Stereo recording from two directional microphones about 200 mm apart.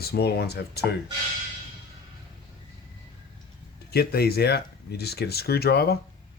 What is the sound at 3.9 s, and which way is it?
Speech, 50° left (ahead or behind).